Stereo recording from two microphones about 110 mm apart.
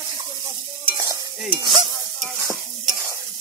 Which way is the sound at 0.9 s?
30° right (ahead or behind).